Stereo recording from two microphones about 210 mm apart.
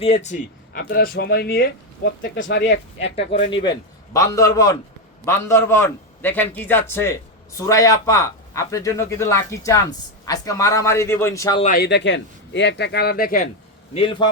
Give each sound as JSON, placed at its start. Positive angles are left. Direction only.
{"t": 0.0, "sound": "speech", "side_deg": 30}
{"t": 3.5, "sound": "a man's voice", "side_deg": 20}
{"t": 11.6, "sound": "speech", "side_deg": 40}
{"t": 11.9, "sound": "speech", "side_deg": 55}
{"t": 13.9, "sound": "a man's voice", "side_deg": 25}